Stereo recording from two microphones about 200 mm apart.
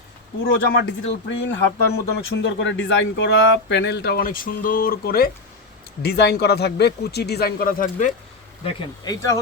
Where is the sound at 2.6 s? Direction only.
65° left (ahead or behind); by 8.1 s 40° left (ahead or behind).